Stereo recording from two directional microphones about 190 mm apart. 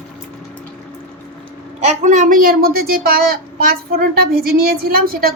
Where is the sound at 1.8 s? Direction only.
40° right (ahead or behind).